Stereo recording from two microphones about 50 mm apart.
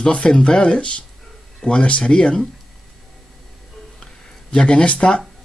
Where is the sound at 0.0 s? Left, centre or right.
Left.